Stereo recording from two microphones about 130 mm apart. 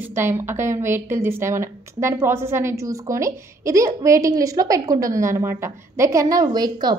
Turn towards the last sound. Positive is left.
turn(degrees=-30)  # may be behind; listen again after turning